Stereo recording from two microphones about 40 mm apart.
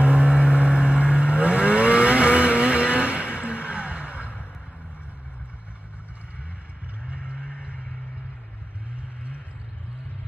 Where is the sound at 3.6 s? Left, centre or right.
Right.